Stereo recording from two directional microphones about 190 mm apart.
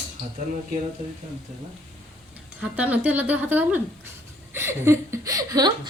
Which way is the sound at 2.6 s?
10° right (ahead or behind).